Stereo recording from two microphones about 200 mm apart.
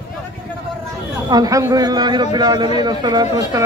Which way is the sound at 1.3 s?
20° right (ahead or behind).